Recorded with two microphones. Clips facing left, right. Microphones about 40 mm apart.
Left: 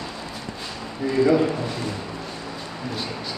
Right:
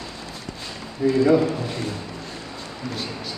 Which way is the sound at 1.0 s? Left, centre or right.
Centre.